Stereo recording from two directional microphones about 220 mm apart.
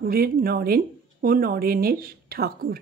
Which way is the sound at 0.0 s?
40° right (ahead or behind).